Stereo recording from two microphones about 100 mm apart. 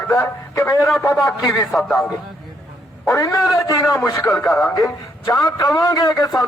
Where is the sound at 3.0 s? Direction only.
30° left (ahead or behind).